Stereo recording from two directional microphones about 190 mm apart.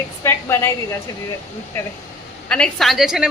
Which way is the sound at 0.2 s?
15° left (ahead or behind).